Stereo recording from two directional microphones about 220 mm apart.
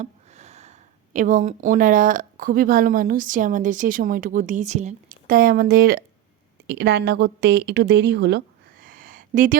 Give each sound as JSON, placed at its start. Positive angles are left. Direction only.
{"t": 0.0, "sound": "speech", "side_deg": -30}